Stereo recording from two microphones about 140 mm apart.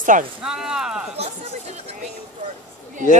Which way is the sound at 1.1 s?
50° right (ahead or behind).